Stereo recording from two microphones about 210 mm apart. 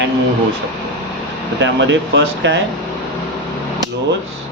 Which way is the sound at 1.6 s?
60° right (ahead or behind).